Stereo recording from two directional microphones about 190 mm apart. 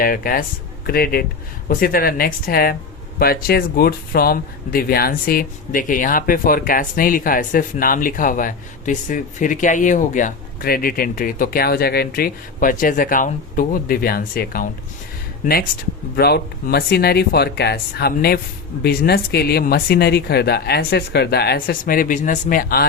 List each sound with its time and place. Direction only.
0.0 s speech: 50° left (ahead or behind)
16.1 s speech: 55° left (ahead or behind)